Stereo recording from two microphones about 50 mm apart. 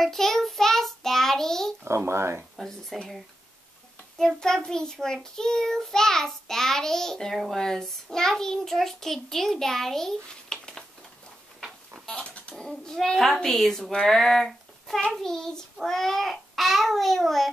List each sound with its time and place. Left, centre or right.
0.0 s child singing: centre
1.9 s a child's voice: right
2.9 s child singing: centre
4.6 s child singing: centre
12.2 s a sound: left
12.5 s child singing: centre